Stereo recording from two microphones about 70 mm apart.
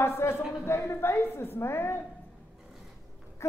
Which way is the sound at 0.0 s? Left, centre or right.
Left.